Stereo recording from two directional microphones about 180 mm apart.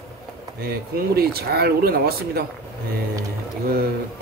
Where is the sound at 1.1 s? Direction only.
60° right (ahead or behind).